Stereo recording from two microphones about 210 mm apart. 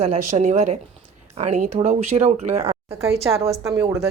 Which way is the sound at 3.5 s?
15° right (ahead or behind).